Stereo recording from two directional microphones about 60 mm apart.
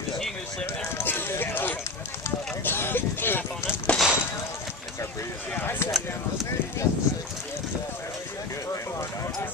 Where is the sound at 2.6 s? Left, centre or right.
Left.